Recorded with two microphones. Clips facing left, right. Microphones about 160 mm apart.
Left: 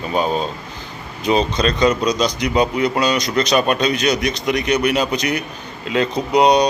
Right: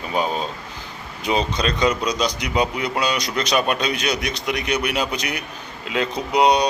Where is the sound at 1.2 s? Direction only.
10° right (ahead or behind).